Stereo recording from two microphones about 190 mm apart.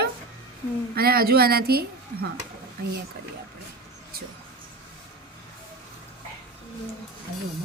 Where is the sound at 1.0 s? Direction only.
55° right (ahead or behind).